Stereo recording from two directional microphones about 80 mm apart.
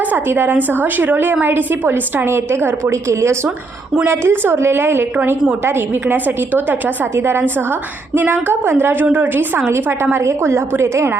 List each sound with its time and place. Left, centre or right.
0.0 s a woman's voice: right